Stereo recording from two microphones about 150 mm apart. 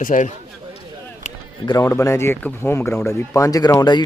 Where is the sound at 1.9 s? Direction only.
20° left (ahead or behind).